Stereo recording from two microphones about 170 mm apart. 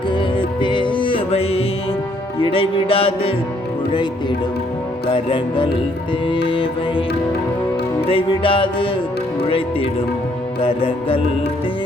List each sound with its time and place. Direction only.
0.1 s music: 30° left (ahead or behind)
5.1 s music: 30° left (ahead or behind)
8.1 s music: 30° left (ahead or behind)